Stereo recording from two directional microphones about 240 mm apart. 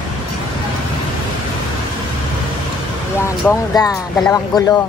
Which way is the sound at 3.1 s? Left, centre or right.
Centre.